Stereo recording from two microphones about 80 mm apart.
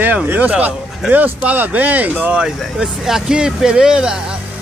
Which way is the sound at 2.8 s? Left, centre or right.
Centre.